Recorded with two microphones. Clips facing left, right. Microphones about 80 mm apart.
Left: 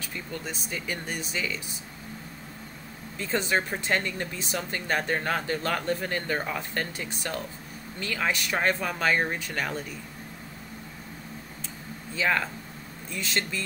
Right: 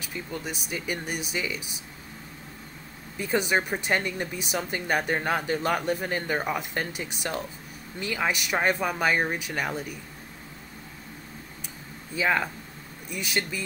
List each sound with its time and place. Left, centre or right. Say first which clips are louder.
0.0 s speech: right 1 dB; centre
3.2 s speech: right 2 dB; centre
12.2 s speech: right 1 dB; centre